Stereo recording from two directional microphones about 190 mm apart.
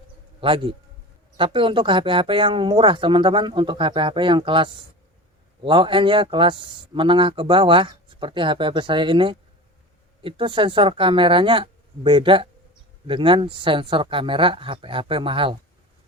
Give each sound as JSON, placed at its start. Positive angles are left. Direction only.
{"t": 0.4, "sound": "speech", "side_deg": -25}